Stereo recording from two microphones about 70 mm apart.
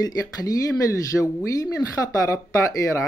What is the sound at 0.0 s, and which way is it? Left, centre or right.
Speech, left.